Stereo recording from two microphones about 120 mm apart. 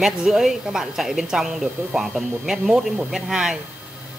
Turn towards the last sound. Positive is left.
turn(degrees=-5)  # may be behind; listen again after turning